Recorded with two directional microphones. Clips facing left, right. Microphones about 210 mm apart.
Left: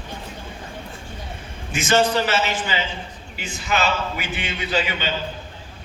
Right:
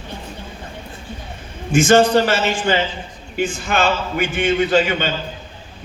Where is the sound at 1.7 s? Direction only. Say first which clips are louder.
Right 7 dB; 50° right (ahead or behind).